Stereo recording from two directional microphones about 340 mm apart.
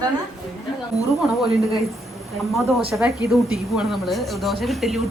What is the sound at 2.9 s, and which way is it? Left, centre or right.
Speech, centre.